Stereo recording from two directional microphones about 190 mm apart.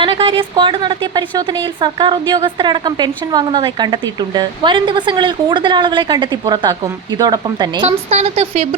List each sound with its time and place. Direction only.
0.0 s a woman's voice: 25° right (ahead or behind)
7.9 s speech: 35° right (ahead or behind)